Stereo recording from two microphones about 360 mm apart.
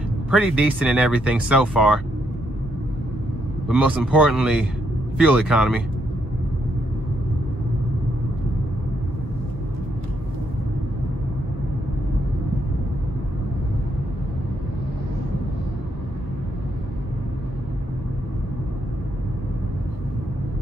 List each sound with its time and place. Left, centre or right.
0.3 s speech: centre
3.6 s speech: centre